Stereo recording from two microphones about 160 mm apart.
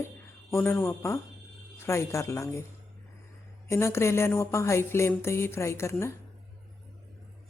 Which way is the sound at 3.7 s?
15° left (ahead or behind).